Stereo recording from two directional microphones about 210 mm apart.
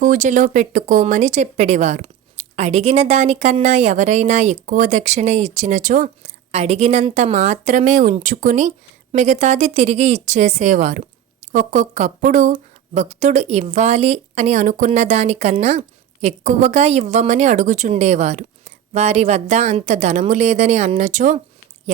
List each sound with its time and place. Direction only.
0.0 s speech: 40° right (ahead or behind)